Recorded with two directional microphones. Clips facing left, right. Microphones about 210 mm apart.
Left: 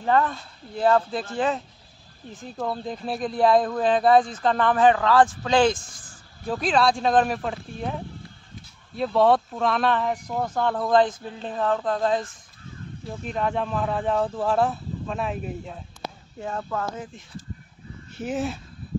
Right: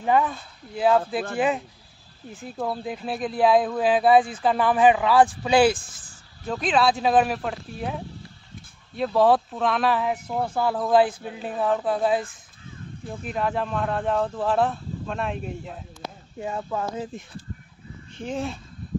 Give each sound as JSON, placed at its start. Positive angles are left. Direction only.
{"t": 0.0, "sound": "speech", "side_deg": -10}
{"t": 2.3, "sound": "speech", "side_deg": -5}
{"t": 16.3, "sound": "speech", "side_deg": -15}
{"t": 18.1, "sound": "speech", "side_deg": 5}